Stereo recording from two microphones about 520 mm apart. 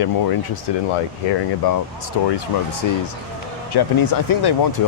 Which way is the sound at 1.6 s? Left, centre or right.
Left.